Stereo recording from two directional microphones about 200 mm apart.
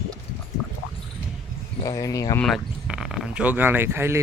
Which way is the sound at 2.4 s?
Centre (ahead or behind).